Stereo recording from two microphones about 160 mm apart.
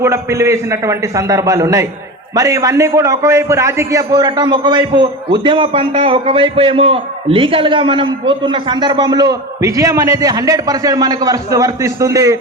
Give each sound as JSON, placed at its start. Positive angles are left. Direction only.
{"t": 0.0, "sound": "a man's voice", "side_deg": -20}